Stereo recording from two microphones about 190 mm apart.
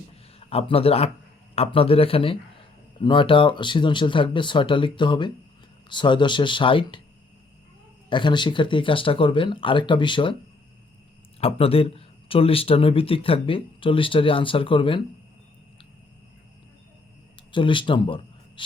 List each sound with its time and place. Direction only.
0.3 s speech: 30° left (ahead or behind)
8.1 s speech: 25° left (ahead or behind)
11.3 s speech: 30° left (ahead or behind)
17.5 s speech: 25° left (ahead or behind)